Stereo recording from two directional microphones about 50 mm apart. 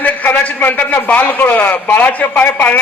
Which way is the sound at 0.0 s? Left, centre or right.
Left.